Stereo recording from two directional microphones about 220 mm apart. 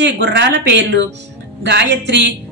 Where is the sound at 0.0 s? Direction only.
50° right (ahead or behind).